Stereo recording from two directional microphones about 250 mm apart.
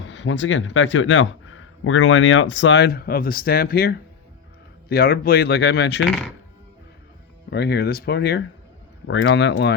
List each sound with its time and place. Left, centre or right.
0.0 s speech: left
7.5 s speech: left